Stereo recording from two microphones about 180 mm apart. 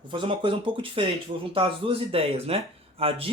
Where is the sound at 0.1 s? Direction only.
30° right (ahead or behind).